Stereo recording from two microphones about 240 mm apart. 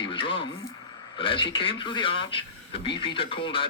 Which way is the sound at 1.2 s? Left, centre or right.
Left.